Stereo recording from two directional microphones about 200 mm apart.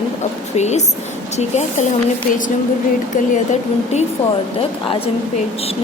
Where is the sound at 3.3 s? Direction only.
35° left (ahead or behind).